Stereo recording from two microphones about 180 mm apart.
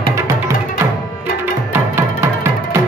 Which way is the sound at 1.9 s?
15° right (ahead or behind).